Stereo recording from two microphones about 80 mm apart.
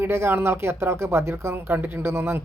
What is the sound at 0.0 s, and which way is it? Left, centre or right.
Speech, right.